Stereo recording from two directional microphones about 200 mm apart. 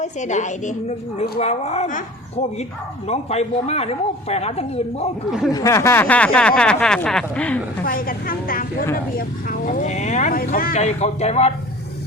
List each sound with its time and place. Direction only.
0.0 s speech: 35° left (ahead or behind)
3.1 s speech: 30° left (ahead or behind)
5.5 s speech: 15° left (ahead or behind)
7.9 s a woman's voice: 45° left (ahead or behind)